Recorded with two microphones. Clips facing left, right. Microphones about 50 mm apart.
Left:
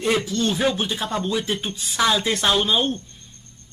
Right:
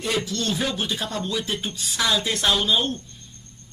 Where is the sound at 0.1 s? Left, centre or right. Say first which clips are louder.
Left 3 dB; left.